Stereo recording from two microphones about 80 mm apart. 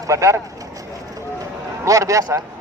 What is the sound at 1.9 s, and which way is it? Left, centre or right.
Speech, right.